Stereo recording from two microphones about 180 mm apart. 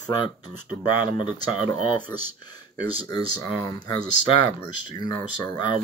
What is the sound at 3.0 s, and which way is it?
Speech, 20° left (ahead or behind).